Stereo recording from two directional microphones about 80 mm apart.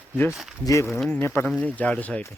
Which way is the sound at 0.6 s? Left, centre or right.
Left.